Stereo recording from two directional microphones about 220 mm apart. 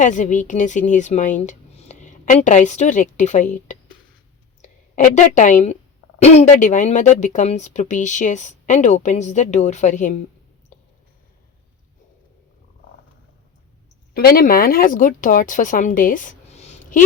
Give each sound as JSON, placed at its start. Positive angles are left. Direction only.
{"t": 0.0, "sound": "a woman's voice", "side_deg": 35}
{"t": 4.9, "sound": "a woman's voice", "side_deg": 35}
{"t": 14.1, "sound": "speech", "side_deg": 45}